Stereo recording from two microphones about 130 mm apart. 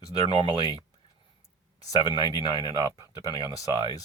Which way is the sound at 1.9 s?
35° left (ahead or behind).